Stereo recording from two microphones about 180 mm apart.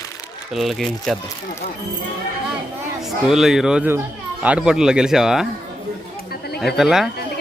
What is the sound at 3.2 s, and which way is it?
Speech, centre (ahead or behind).